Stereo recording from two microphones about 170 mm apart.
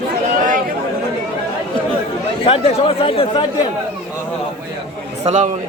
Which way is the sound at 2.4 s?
35° left (ahead or behind).